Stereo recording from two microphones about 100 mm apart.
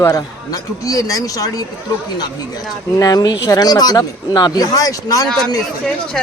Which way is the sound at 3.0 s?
40° left (ahead or behind).